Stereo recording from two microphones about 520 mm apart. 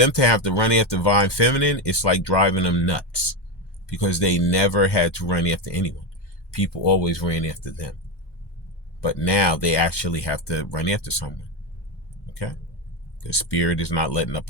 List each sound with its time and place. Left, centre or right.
0.0 s speech: left
9.0 s speech: left
13.8 s speech: left